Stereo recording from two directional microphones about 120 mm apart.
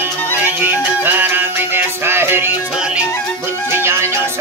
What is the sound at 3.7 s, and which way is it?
Music, 20° right (ahead or behind).